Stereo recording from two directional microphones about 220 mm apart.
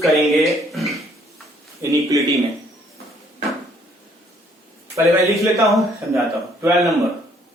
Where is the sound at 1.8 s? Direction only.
15° right (ahead or behind).